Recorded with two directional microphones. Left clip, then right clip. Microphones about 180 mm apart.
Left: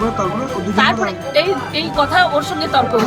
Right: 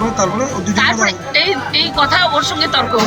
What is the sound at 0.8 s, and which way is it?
Speech, 10° left (ahead or behind).